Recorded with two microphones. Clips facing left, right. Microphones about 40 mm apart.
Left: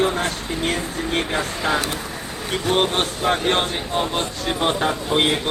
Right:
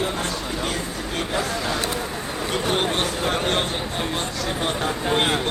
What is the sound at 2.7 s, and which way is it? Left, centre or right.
Speech, left.